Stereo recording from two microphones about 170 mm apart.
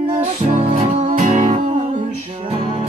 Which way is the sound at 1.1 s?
50° right (ahead or behind).